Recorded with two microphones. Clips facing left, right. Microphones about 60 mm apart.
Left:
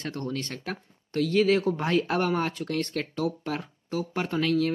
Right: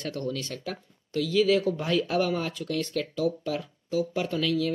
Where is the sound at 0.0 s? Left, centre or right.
Left.